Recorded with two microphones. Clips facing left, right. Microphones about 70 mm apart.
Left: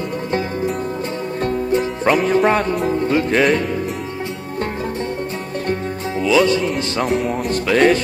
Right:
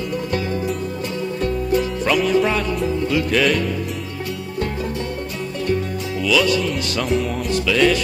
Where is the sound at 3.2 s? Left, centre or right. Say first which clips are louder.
Left 2 dB; left.